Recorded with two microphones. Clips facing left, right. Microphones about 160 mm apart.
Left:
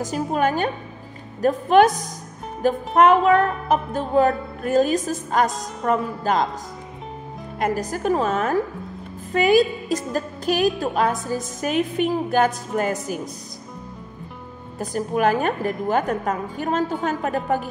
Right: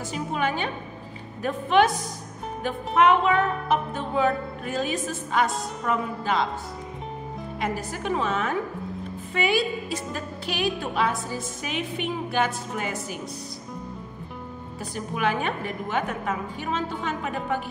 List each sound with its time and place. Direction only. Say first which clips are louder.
0.0 s a woman's voice: left 6 dB; 40° left (ahead or behind)
7.5 s a woman's voice: left 7 dB; 45° left (ahead or behind)
14.8 s a woman's voice: left 7 dB; 45° left (ahead or behind)